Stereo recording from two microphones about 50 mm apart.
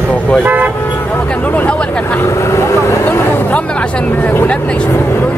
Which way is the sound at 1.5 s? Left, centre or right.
Left.